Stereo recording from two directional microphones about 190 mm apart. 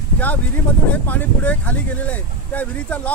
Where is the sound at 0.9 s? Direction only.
10° left (ahead or behind).